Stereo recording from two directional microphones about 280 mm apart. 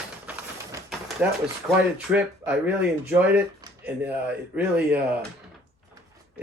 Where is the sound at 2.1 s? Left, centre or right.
Centre.